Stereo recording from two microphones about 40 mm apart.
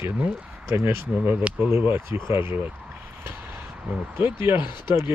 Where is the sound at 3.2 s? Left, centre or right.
Right.